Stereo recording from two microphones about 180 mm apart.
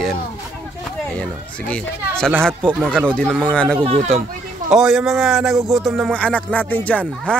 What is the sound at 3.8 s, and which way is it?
Speech, 35° right (ahead or behind).